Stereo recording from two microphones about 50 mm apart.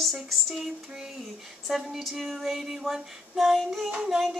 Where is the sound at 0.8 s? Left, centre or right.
Centre.